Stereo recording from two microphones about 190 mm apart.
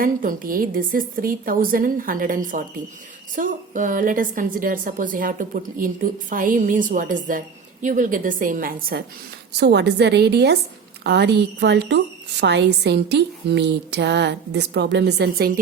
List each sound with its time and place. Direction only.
0.0 s a woman's voice: 45° right (ahead or behind)
9.6 s a woman's voice: 65° right (ahead or behind)